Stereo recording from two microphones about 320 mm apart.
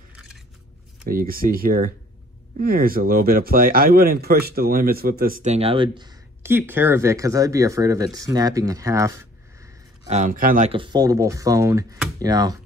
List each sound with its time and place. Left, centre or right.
1.0 s speech: right; by 9.7 s centre
10.0 s speech: right